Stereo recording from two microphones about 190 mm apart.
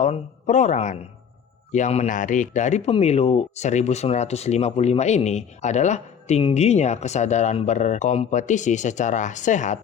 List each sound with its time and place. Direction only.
0.0 s a man's voice: 40° left (ahead or behind)